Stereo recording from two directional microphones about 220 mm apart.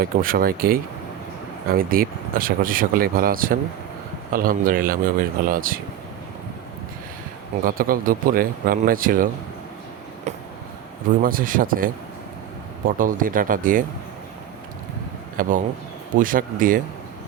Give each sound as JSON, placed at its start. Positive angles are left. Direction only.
{"t": 0.0, "sound": "speech", "side_deg": -40}
{"t": 7.6, "sound": "speech", "side_deg": -40}
{"t": 10.3, "sound": "a sound", "side_deg": -30}
{"t": 11.2, "sound": "speech", "side_deg": -40}
{"t": 13.0, "sound": "speech", "side_deg": -40}
{"t": 15.4, "sound": "speech", "side_deg": -40}